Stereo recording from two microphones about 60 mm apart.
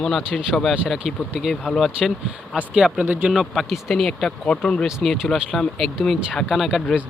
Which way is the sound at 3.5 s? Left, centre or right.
Centre.